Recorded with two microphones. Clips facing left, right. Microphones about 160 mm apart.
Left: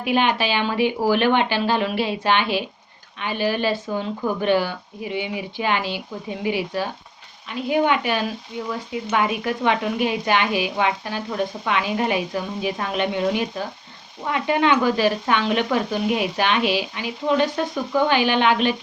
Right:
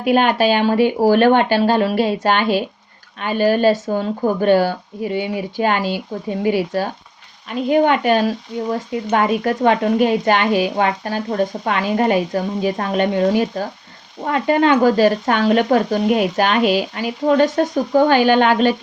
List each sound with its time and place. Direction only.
0.0 s speech: 45° right (ahead or behind)